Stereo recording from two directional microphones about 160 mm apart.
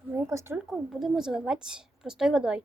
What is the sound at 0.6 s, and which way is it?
A woman's voice, centre (ahead or behind).